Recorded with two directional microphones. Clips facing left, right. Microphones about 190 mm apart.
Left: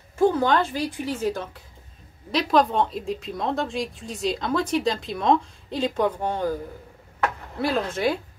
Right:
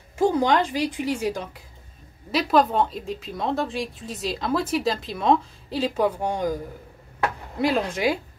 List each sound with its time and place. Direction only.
0.2 s a woman's voice: 15° right (ahead or behind)
2.3 s a woman's voice: 5° right (ahead or behind)